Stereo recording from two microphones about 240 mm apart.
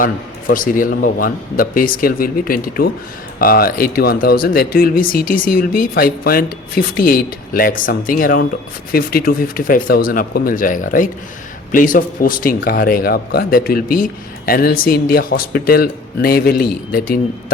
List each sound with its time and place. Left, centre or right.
0.0 s speech: left